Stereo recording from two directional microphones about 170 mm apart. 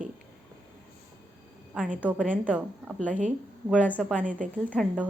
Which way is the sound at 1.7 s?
5° right (ahead or behind).